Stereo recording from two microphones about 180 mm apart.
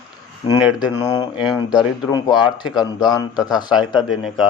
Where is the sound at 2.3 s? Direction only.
5° right (ahead or behind).